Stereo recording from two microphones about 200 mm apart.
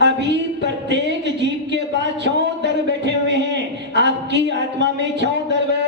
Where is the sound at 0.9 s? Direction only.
60° right (ahead or behind).